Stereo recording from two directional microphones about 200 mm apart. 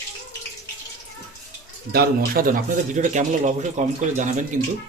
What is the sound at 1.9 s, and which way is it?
A man's voice, 50° right (ahead or behind).